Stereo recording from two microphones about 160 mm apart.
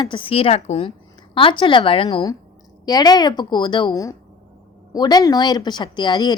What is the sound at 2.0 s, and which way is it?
A woman's voice, 25° left (ahead or behind).